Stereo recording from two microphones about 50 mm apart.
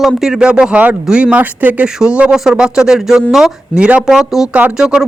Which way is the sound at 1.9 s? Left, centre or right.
Centre.